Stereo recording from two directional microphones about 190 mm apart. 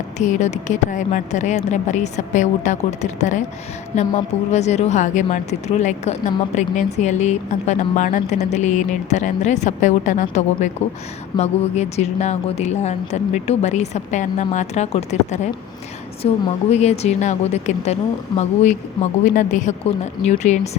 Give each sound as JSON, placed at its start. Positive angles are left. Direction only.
{"t": 0.2, "sound": "speech", "side_deg": 40}
{"t": 4.5, "sound": "speech", "side_deg": 35}